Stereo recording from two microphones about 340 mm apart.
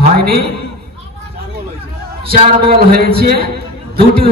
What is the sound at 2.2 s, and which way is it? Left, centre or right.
A man's voice, right.